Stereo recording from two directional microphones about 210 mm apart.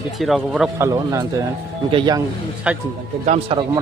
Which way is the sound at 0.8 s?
15° right (ahead or behind).